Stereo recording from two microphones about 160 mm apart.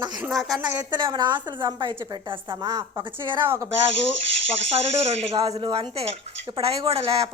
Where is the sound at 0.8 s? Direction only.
30° right (ahead or behind).